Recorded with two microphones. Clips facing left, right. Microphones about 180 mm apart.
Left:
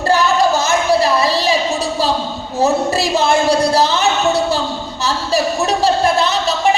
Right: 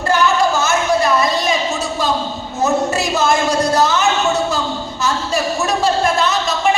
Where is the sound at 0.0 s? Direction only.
35° left (ahead or behind).